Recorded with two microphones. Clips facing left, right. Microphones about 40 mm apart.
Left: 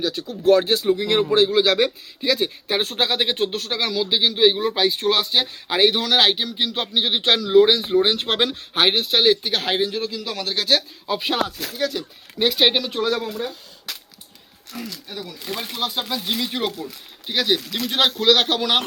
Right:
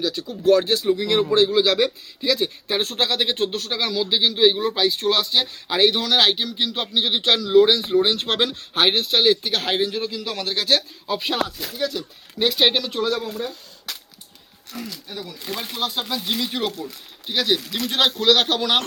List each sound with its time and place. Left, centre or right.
0.0 s a man's voice: centre
13.3 s a sound: centre
14.7 s speech: centre